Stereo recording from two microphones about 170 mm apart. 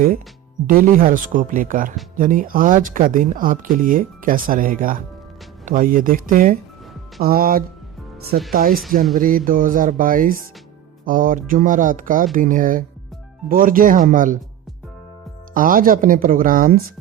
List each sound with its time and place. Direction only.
0.7 s speech: 55° right (ahead or behind)
15.5 s speech: 55° right (ahead or behind)